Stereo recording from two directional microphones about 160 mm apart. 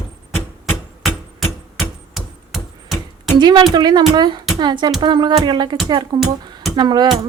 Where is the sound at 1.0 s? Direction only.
Centre (ahead or behind).